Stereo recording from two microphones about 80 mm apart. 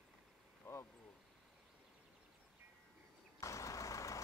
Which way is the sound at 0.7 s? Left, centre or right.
Left.